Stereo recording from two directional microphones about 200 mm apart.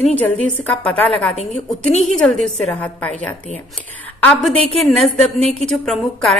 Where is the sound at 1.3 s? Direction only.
30° left (ahead or behind).